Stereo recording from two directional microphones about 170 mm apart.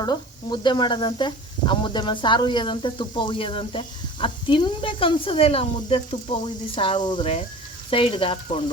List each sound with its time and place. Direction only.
0.0 s speech: 25° left (ahead or behind)
7.9 s frying: 30° left (ahead or behind)